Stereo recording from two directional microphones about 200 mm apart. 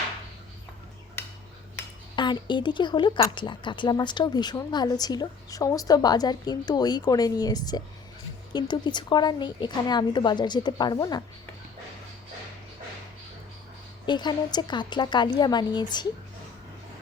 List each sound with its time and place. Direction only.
2.1 s a woman's voice: 25° left (ahead or behind)
14.1 s a woman's voice: 20° left (ahead or behind)